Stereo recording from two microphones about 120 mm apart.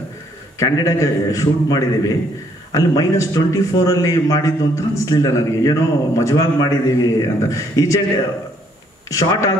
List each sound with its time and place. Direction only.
0.6 s a man's voice: 30° left (ahead or behind)
9.1 s a man's voice: 25° left (ahead or behind)